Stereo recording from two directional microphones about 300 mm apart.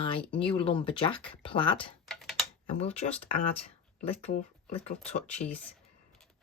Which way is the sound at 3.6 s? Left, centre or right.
Centre.